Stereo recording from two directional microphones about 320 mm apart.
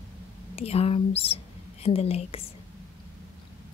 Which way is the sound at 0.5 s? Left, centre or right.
Centre.